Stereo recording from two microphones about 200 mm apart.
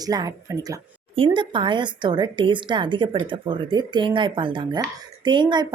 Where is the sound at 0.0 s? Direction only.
20° right (ahead or behind).